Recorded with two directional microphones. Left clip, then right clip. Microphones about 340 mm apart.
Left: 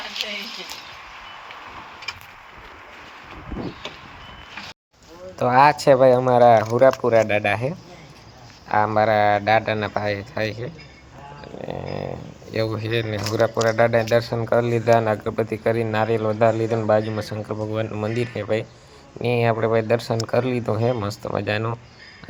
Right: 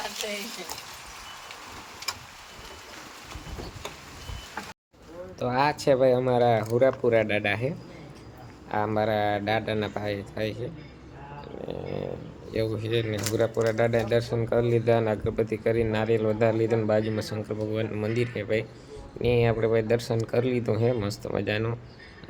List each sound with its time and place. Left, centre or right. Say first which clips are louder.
2.1 s vehicle: left 1 dB; centre
5.4 s speech: left 10 dB; centre
8.7 s speech: left 8 dB; centre
11.6 s a sound: left 4 dB; centre
12.5 s speech: left 4 dB; centre